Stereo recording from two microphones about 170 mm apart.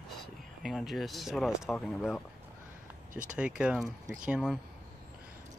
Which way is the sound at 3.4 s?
5° right (ahead or behind).